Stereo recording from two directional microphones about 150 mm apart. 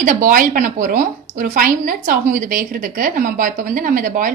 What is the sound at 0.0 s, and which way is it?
A woman's voice, 65° right (ahead or behind).